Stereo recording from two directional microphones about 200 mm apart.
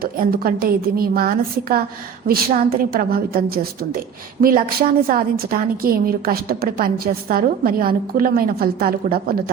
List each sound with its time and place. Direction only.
0.0 s a woman's voice: 50° right (ahead or behind)